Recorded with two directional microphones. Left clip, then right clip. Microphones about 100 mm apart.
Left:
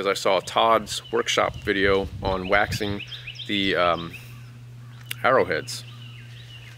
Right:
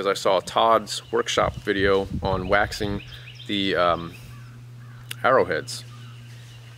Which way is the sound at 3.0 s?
10° left (ahead or behind).